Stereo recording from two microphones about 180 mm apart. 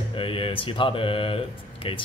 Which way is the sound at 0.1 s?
30° left (ahead or behind).